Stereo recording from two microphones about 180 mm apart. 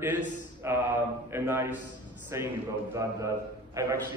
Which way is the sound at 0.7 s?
15° right (ahead or behind).